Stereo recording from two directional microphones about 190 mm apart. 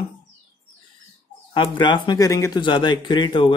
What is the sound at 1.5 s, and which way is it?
Speech, 25° left (ahead or behind).